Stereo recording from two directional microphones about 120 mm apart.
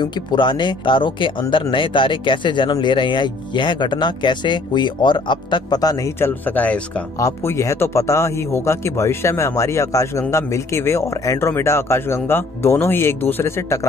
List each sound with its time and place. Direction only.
0.0 s speech: 40° left (ahead or behind); by 6.8 s 15° left (ahead or behind)
7.2 s a man's voice: 25° left (ahead or behind)